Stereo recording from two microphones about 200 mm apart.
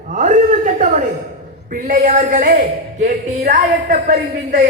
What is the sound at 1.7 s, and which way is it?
Speech, 40° right (ahead or behind).